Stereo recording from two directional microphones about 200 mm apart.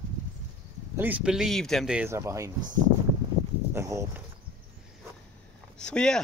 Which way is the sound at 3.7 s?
15° right (ahead or behind).